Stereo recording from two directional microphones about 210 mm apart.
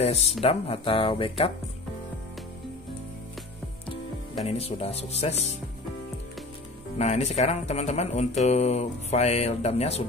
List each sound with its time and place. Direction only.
0.0 s speech: 30° left (ahead or behind)
4.5 s speech: 30° left (ahead or behind)
7.0 s speech: 30° left (ahead or behind)